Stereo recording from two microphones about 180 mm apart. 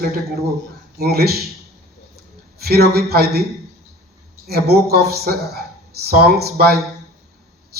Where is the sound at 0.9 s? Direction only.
60° right (ahead or behind).